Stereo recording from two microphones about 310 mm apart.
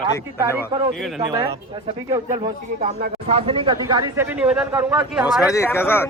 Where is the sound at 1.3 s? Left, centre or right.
Centre.